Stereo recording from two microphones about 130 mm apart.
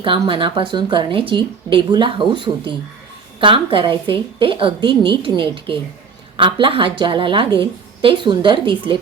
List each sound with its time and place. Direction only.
0.0 s speech: 40° right (ahead or behind)